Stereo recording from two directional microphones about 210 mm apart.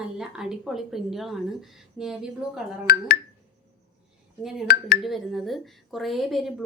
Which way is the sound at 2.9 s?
45° left (ahead or behind).